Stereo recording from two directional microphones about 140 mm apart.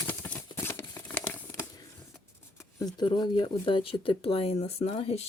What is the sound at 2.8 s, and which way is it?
Speech, 30° left (ahead or behind).